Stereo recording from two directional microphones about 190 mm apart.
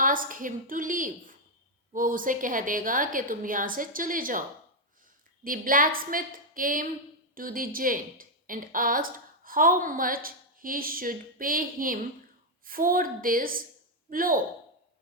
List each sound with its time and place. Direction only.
0.0 s a woman's voice: 45° right (ahead or behind)